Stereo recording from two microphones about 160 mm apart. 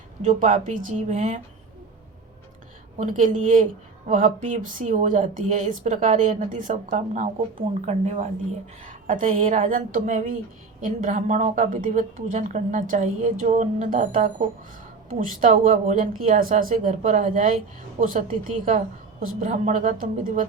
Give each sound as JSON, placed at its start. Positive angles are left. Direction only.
{"t": 0.2, "sound": "a woman's voice", "side_deg": -50}
{"t": 3.0, "sound": "a woman's voice", "side_deg": -50}